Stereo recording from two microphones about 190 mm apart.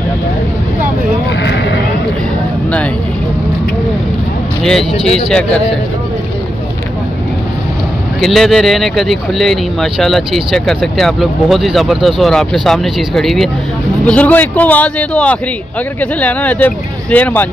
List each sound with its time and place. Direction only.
1.4 s sheep: 65° left (ahead or behind)
5.0 s speech: 5° left (ahead or behind)
8.2 s speech: centre (ahead or behind)